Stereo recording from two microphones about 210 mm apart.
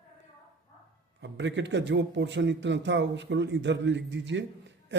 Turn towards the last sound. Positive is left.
turn(degrees=-55)  # may be behind; listen again after turning